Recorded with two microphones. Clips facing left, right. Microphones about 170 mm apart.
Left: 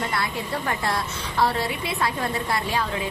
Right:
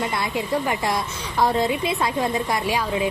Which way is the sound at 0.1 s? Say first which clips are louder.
Right 4 dB; 15° right (ahead or behind).